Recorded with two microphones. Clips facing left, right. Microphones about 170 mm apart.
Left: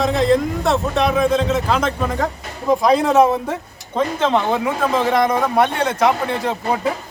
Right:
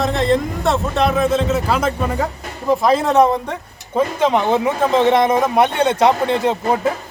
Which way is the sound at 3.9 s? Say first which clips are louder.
Right 2 dB; 15° right (ahead or behind).